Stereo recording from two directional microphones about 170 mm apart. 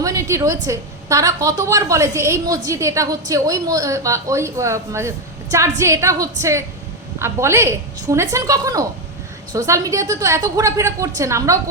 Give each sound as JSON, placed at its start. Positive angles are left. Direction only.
{"t": 0.0, "sound": "a woman's voice", "side_deg": -20}